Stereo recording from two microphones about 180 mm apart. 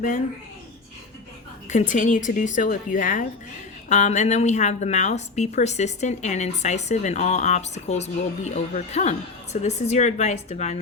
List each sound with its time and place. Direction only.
1.7 s a woman's voice: 45° left (ahead or behind)